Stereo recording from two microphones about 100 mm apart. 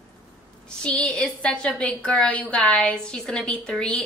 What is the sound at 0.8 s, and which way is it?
A woman's voice, 10° left (ahead or behind).